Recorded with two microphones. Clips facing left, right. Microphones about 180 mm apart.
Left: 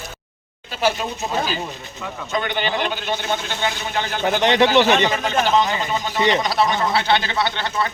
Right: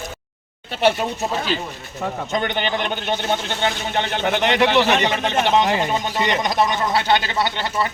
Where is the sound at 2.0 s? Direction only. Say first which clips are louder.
Right 6 dB; 45° right (ahead or behind).